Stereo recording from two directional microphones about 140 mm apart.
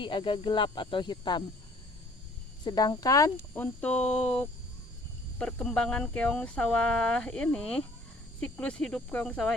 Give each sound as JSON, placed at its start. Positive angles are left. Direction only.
{"t": 0.0, "sound": "speech", "side_deg": 35}
{"t": 2.6, "sound": "speech", "side_deg": 30}
{"t": 3.5, "sound": "speech", "side_deg": 10}